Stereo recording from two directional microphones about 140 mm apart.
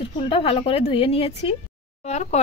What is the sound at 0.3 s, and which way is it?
Speech, 45° left (ahead or behind).